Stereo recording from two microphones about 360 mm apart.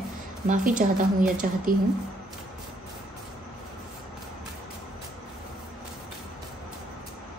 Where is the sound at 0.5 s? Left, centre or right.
Right.